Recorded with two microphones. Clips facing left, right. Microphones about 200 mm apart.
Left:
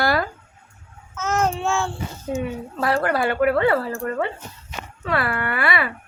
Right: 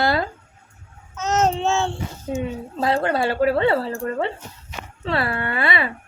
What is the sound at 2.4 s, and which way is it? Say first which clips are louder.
Speech: right 1 dB; 20° right (ahead or behind).